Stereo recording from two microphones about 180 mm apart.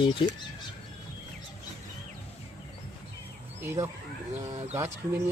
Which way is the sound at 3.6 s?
15° right (ahead or behind).